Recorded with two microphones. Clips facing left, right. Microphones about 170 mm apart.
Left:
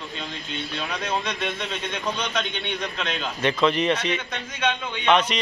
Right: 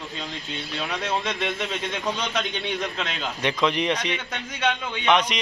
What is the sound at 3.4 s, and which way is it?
A man's voice, 15° right (ahead or behind).